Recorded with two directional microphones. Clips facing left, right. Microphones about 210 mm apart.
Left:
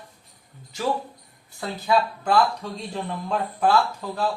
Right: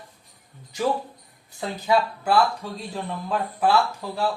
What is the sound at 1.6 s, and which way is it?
Speech, 15° right (ahead or behind).